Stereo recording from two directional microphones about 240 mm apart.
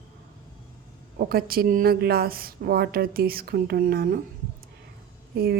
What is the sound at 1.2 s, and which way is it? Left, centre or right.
A woman's voice, right.